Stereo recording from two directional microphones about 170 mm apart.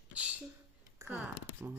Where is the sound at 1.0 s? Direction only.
10° right (ahead or behind).